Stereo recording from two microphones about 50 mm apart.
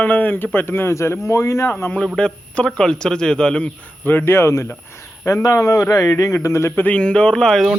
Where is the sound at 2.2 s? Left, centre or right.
Centre.